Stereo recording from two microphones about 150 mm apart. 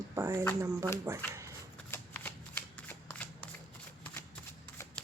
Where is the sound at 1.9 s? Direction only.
10° left (ahead or behind).